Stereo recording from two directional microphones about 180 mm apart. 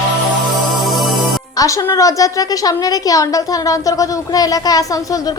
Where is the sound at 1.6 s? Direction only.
20° left (ahead or behind).